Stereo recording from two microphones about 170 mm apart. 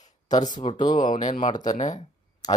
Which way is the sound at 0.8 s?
25° left (ahead or behind).